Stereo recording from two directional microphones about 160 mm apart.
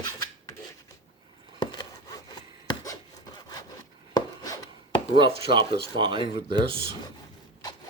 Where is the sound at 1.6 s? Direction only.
25° left (ahead or behind).